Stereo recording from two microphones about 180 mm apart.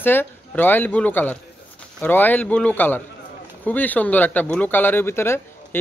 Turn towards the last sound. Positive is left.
turn(degrees=15)  # may be behind; listen again after turning